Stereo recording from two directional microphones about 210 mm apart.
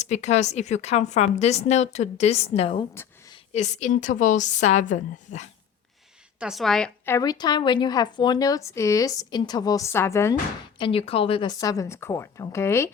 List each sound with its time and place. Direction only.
0.0 s a woman's voice: 35° left (ahead or behind)
2.9 s a sound: 10° left (ahead or behind)
3.3 s a woman's voice: 30° left (ahead or behind)
6.4 s a woman's voice: centre (ahead or behind)
10.8 s a woman's voice: 25° left (ahead or behind)